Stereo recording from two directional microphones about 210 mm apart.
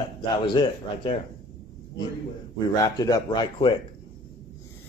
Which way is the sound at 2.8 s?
15° left (ahead or behind).